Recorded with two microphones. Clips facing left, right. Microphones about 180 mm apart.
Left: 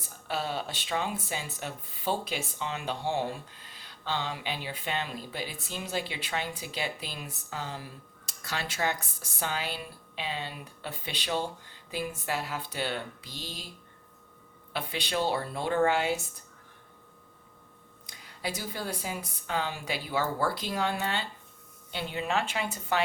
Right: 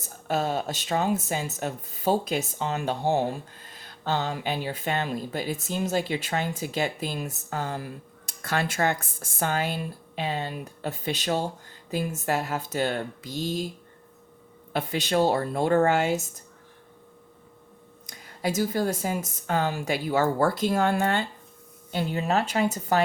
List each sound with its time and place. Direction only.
0.0 s speech: 45° right (ahead or behind)
14.7 s speech: 45° right (ahead or behind)
18.0 s speech: 45° right (ahead or behind)